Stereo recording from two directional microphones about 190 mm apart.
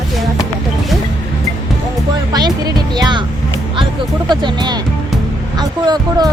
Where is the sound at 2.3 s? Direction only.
20° right (ahead or behind).